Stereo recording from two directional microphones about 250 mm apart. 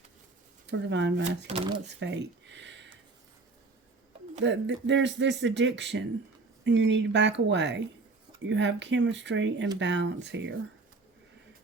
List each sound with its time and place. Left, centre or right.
0.7 s speech: right
1.5 s speech: right
2.0 s a sound: right
4.4 s speech: right